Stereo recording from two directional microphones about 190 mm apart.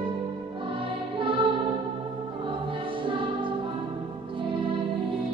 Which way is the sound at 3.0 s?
25° right (ahead or behind).